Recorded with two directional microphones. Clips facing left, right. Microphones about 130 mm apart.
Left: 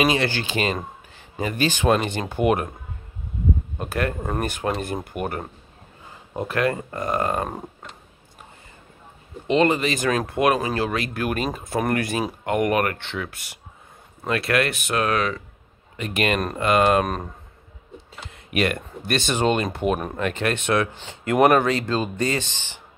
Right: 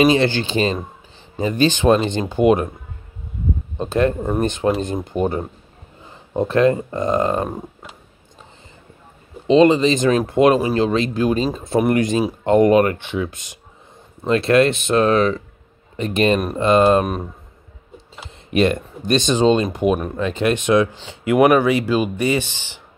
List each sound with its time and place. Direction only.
0.0 s speech: 30° right (ahead or behind)
3.7 s speech: 25° right (ahead or behind)
9.5 s speech: 20° right (ahead or behind)
17.0 s speech: 5° right (ahead or behind)
18.3 s speech: 25° right (ahead or behind)